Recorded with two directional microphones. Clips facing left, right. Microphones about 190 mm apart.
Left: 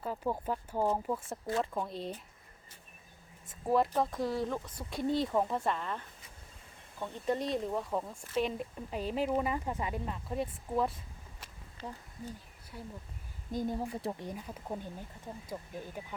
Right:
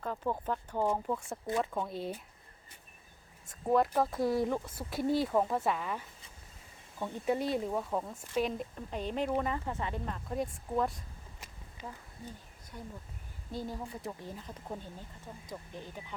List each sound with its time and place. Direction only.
0.0 s speech: 10° left (ahead or behind)
3.4 s speech: centre (ahead or behind)
7.3 s speech: 5° right (ahead or behind)
11.8 s speech: 15° right (ahead or behind)
12.2 s a sound: 10° left (ahead or behind)
13.5 s speech: 15° left (ahead or behind)